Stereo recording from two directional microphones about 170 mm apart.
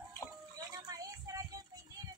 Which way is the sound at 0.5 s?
20° right (ahead or behind).